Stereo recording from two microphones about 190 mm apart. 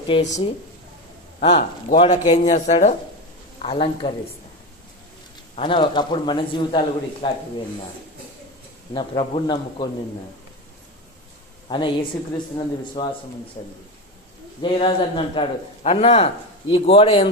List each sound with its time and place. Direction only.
0.1 s a man's voice: 35° left (ahead or behind)
5.5 s a man's voice: 25° left (ahead or behind)
8.9 s a man's voice: 25° left (ahead or behind)
11.7 s a man's voice: 20° left (ahead or behind)
14.6 s a man's voice: 25° left (ahead or behind)